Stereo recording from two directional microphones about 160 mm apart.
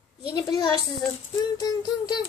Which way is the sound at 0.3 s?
25° left (ahead or behind).